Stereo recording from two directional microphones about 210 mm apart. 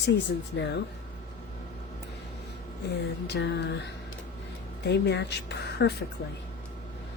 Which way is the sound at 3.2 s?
55° left (ahead or behind).